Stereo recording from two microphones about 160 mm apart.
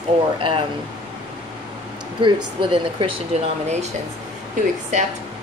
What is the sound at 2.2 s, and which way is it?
Speech, 30° right (ahead or behind).